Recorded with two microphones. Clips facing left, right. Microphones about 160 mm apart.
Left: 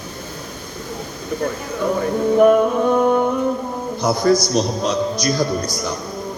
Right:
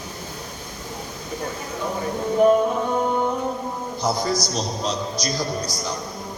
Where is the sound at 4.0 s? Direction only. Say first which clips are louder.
Left 7 dB; 60° left (ahead or behind).